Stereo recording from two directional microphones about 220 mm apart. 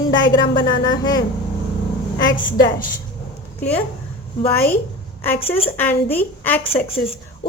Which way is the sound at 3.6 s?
10° left (ahead or behind).